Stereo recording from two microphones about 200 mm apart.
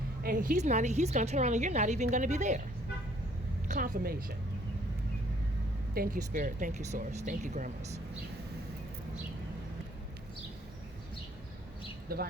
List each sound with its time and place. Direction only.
0.2 s a woman's voice: 45° right (ahead or behind)
3.7 s a woman's voice: 40° right (ahead or behind)
5.9 s a woman's voice: 45° right (ahead or behind)
12.0 s speech: 50° right (ahead or behind)